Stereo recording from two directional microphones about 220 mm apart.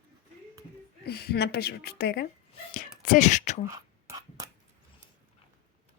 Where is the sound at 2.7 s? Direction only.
35° left (ahead or behind).